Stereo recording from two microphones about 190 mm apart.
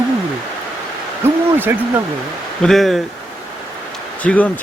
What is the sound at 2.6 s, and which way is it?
Speech, centre (ahead or behind).